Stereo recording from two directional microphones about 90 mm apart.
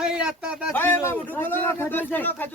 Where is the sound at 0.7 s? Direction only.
25° left (ahead or behind).